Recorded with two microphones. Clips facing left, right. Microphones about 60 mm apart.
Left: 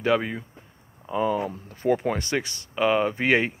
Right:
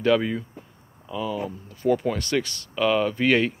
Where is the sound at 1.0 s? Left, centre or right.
Left.